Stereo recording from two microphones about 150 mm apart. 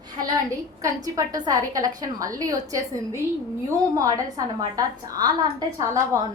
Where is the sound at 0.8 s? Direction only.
25° right (ahead or behind).